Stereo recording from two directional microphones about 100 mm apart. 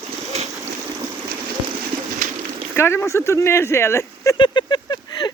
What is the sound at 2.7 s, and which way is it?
Speech, 25° left (ahead or behind).